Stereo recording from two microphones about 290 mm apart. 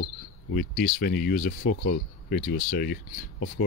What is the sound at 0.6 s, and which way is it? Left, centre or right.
Speech, left.